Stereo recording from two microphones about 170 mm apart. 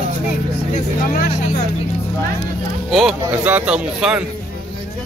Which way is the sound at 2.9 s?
Centre (ahead or behind).